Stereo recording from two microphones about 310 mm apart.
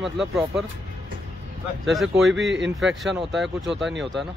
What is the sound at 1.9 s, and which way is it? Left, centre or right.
Speech, centre.